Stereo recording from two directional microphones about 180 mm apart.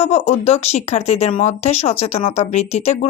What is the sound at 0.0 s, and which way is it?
Speech, 35° left (ahead or behind).